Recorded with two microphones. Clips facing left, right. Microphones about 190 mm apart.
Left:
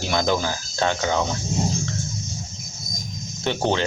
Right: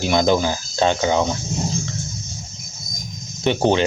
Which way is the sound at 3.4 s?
15° right (ahead or behind).